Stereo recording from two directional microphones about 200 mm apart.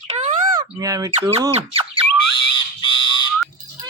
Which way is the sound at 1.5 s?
30° right (ahead or behind).